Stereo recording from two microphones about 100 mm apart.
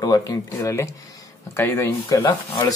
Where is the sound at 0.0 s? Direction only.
35° left (ahead or behind).